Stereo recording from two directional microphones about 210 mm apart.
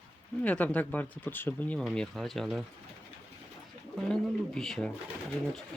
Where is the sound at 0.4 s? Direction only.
5° left (ahead or behind).